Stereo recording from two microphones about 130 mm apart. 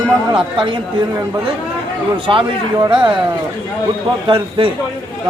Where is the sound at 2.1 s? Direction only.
40° right (ahead or behind).